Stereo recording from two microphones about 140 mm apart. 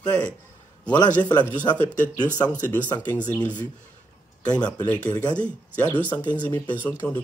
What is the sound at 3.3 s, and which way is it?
Speech, 30° left (ahead or behind).